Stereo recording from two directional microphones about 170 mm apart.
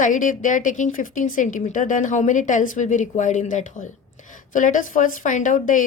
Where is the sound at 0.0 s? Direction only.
50° left (ahead or behind).